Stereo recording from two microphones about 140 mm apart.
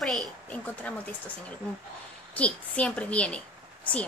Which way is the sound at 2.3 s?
10° left (ahead or behind).